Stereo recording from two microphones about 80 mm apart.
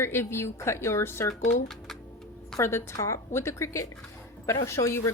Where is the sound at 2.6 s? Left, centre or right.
Left.